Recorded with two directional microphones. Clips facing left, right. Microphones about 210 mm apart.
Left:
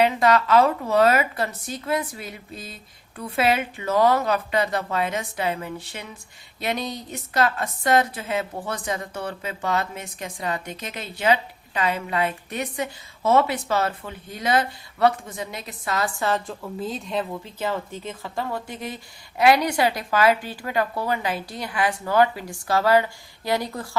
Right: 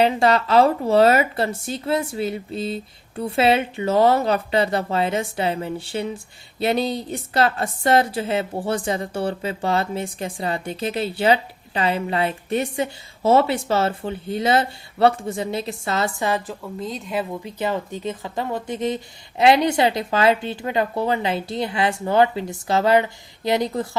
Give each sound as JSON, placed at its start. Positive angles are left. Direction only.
{"t": 0.0, "sound": "a woman's voice", "side_deg": -30}
{"t": 16.5, "sound": "speech", "side_deg": 0}
{"t": 17.4, "sound": "a woman's voice", "side_deg": -15}